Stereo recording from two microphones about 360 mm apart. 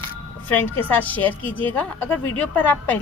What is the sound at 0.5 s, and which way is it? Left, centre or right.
A woman's voice, centre.